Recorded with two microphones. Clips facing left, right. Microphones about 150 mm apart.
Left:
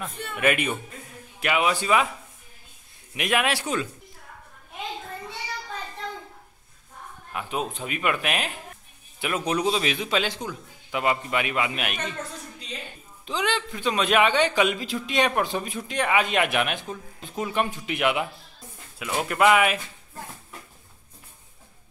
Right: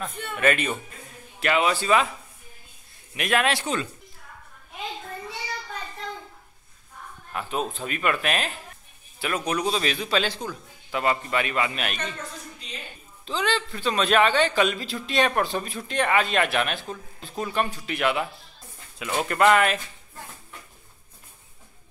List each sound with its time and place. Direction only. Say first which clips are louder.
0.0 s a man's voice: right 1 dB; 10° left (ahead or behind)
3.2 s a man's voice: right 1 dB; 15° left (ahead or behind)
7.3 s a man's voice: right 1 dB; 10° left (ahead or behind)
9.5 s a man's voice: left 2 dB; 25° left (ahead or behind)
13.2 s a man's voice: right 1 dB; 15° left (ahead or behind)
18.9 s a man's voice: right 1 dB; 5° left (ahead or behind)